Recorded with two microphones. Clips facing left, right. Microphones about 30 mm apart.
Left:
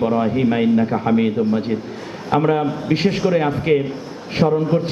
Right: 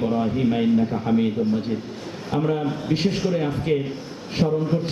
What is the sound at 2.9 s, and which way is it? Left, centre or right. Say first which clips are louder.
Speech: left 4 dB; centre.